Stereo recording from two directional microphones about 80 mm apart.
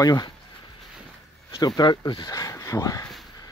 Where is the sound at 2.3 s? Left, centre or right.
Left.